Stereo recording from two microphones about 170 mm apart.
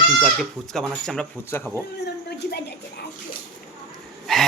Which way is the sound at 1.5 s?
15° left (ahead or behind).